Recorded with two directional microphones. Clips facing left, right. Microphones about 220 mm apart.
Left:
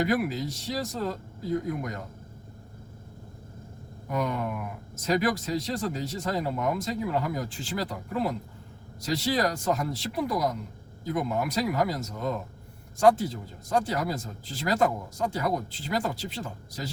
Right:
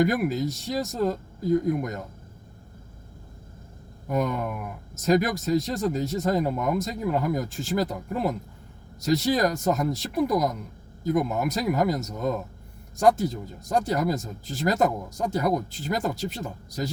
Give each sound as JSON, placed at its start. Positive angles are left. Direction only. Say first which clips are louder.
{"t": 0.0, "sound": "speech", "louder": "right 3 dB", "side_deg": -45}
{"t": 4.9, "sound": "speech", "louder": "right 3 dB", "side_deg": -45}